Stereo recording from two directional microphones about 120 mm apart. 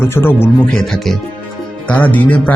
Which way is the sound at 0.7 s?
5° left (ahead or behind).